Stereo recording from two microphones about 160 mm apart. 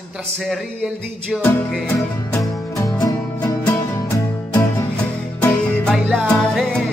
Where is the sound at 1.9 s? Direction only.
15° left (ahead or behind).